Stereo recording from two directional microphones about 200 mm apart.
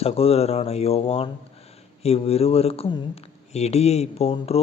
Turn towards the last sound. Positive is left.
turn(degrees=30)  # may be behind; listen again after turning